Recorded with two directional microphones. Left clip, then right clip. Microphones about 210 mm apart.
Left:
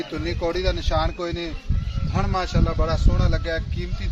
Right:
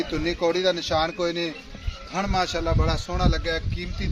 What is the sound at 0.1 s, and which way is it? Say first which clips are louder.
A man's voice: right 2 dB; 45° right (ahead or behind).